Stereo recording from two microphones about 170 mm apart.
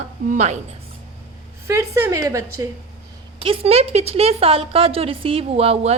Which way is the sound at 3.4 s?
35° right (ahead or behind).